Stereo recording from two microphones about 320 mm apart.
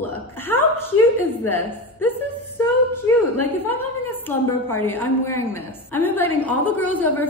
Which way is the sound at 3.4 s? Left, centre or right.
Centre.